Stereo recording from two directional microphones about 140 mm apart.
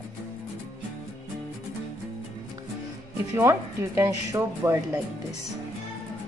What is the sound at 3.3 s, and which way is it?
Speech, 20° right (ahead or behind).